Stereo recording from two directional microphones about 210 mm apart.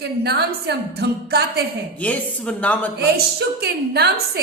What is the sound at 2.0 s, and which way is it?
Speech, 5° left (ahead or behind).